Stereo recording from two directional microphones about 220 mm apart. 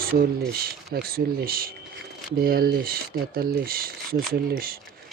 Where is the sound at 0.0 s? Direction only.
45° right (ahead or behind).